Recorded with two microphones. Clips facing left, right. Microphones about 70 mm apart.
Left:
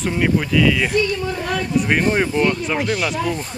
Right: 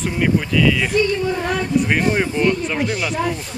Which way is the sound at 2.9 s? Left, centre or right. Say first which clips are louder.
Left 2 dB; centre.